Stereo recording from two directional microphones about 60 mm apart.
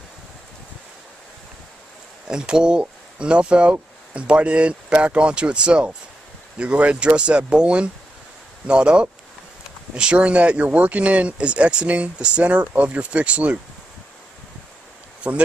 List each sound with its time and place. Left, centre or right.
2.2 s speech: centre